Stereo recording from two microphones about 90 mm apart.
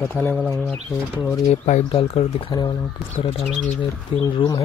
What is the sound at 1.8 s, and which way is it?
Speech, 90° left.